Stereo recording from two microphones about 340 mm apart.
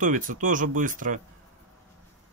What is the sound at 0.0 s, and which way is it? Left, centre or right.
Speech, right.